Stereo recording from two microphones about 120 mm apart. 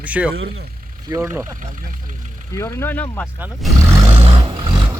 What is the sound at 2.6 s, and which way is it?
Speech, 25° left (ahead or behind).